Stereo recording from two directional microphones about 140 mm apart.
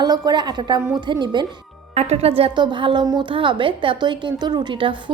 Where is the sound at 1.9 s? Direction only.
50° right (ahead or behind).